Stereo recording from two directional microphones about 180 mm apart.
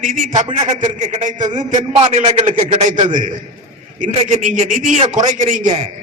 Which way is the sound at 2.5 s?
30° right (ahead or behind).